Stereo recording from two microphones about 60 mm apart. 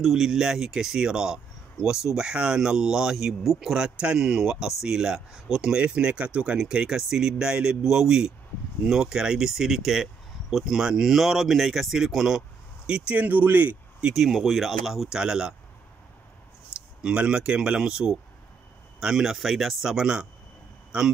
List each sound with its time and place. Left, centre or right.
0.0 s speech: centre
13.1 s speech: right
14.1 s speech: centre
17.0 s speech: centre